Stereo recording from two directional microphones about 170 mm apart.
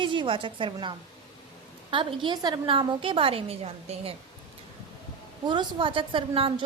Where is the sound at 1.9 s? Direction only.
30° right (ahead or behind).